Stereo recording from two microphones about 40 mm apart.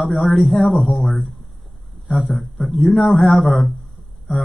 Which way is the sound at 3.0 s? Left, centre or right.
Centre.